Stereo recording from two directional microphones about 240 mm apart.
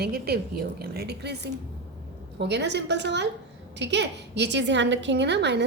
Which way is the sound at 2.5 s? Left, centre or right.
Right.